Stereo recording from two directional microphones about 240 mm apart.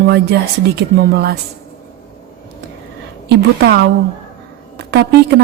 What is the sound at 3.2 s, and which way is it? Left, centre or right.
Speech, right.